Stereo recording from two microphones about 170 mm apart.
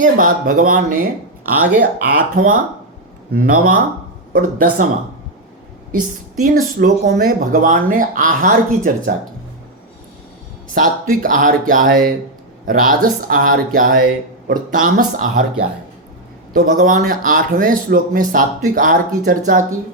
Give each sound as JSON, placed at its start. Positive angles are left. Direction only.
{"t": 0.0, "sound": "speech", "side_deg": -50}
{"t": 6.4, "sound": "speech", "side_deg": -55}
{"t": 10.8, "sound": "speech", "side_deg": -55}
{"t": 16.6, "sound": "speech", "side_deg": -50}